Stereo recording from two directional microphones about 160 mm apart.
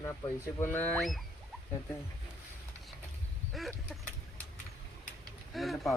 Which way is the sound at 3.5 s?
Centre (ahead or behind).